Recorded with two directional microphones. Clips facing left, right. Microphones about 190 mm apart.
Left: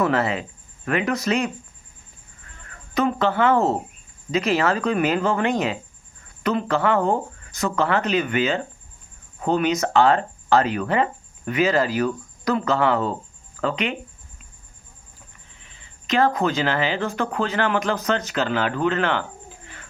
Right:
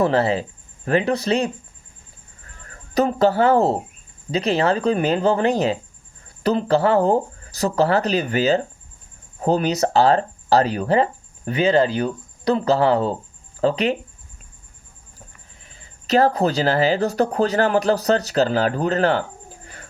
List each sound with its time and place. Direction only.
0.0 s speech: 30° right (ahead or behind)
2.6 s speech: 35° right (ahead or behind)
15.6 s speech: 40° right (ahead or behind)